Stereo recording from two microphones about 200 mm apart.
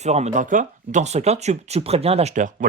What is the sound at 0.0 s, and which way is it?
Speech, 35° right (ahead or behind).